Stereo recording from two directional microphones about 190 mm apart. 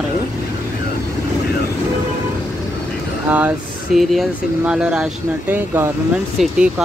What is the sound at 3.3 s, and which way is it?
Speech, 10° right (ahead or behind).